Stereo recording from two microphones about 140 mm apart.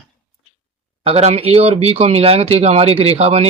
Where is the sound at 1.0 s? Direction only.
50° right (ahead or behind).